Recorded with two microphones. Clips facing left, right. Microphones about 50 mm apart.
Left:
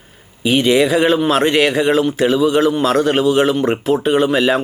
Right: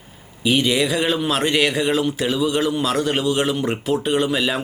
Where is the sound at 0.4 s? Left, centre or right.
Centre.